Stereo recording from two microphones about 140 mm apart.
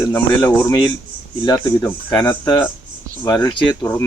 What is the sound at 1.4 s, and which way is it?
Speech, 30° left (ahead or behind).